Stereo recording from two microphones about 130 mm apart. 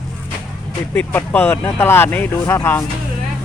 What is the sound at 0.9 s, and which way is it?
Speech, 15° left (ahead or behind).